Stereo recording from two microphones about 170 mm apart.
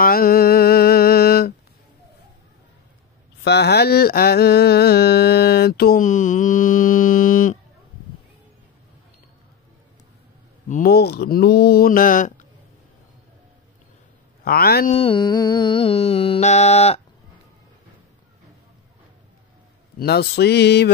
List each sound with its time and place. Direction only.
0.0 s a sound: 60° left (ahead or behind)
3.4 s a sound: 80° left; by 7.5 s 50° left (ahead or behind)
10.7 s speech: 60° left (ahead or behind)
14.4 s speech: 65° left (ahead or behind)
14.9 s music: 30° left (ahead or behind)
20.0 s mantra: 70° left (ahead or behind)